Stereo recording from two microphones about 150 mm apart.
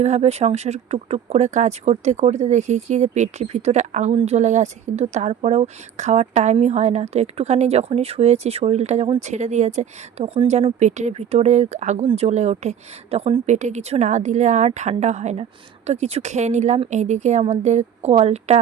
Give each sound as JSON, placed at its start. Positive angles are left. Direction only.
{"t": 0.0, "sound": "speech", "side_deg": -45}